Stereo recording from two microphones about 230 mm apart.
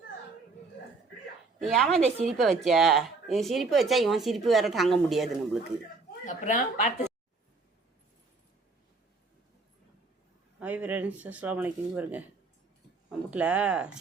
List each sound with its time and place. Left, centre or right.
1.6 s speech: centre
6.2 s speech: left
10.6 s speech: centre